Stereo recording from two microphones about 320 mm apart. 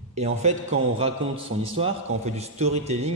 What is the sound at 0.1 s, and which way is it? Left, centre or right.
Speech, right.